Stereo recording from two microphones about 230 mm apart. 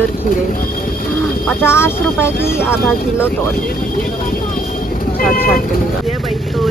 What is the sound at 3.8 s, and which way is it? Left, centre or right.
Vehicle, left.